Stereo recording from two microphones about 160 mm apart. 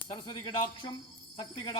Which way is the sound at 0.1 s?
30° left (ahead or behind).